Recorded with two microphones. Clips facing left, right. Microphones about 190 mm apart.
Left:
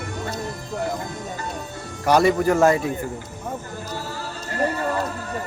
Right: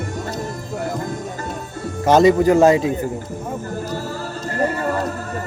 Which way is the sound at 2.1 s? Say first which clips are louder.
Right 5 dB; 20° right (ahead or behind).